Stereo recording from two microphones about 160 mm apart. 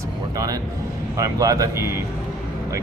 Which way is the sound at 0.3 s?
20° right (ahead or behind).